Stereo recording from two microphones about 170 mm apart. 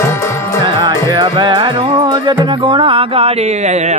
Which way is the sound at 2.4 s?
30° right (ahead or behind).